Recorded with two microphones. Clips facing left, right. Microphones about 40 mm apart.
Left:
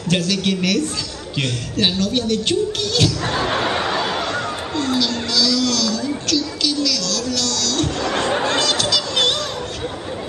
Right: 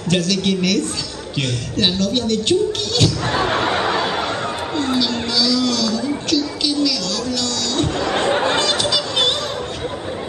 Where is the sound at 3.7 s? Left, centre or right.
Centre.